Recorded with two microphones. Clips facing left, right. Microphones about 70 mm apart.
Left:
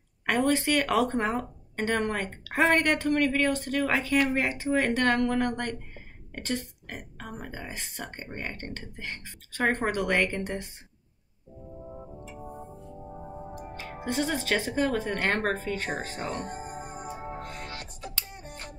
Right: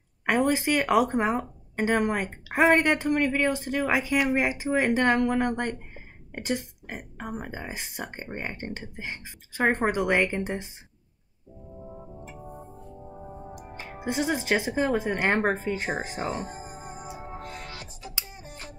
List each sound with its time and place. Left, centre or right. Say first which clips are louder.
0.3 s a woman's voice: right 1 dB; centre
11.8 s music: right 1 dB; centre
13.8 s a woman's voice: right 2 dB; centre
16.3 s speech: even; left
17.4 s music: left 1 dB; left
18.2 s music: even; centre